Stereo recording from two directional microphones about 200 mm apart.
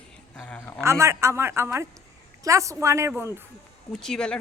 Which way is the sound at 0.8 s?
15° right (ahead or behind).